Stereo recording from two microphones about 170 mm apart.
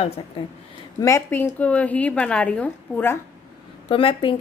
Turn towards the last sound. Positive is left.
turn(degrees=30)  # may be behind; listen again after turning